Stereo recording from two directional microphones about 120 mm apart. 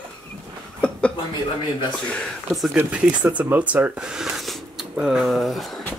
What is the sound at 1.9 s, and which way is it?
Speech, 5° left (ahead or behind).